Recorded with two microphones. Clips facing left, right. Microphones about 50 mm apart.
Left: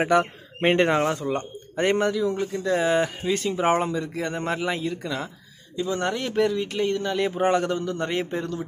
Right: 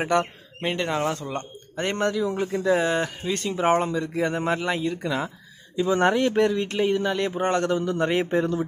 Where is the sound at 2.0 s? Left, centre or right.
Centre.